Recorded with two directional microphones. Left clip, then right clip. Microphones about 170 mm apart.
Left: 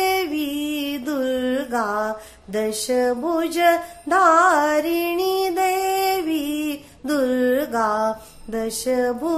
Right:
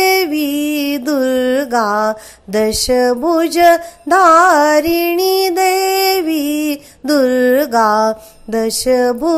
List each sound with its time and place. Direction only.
0.0 s music: 40° right (ahead or behind)